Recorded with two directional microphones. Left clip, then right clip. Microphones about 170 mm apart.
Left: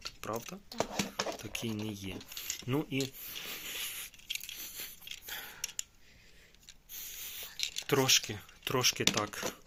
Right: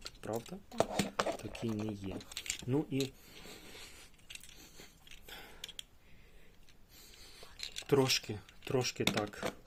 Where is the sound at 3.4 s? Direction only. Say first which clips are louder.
Left 11 dB; 5° right (ahead or behind).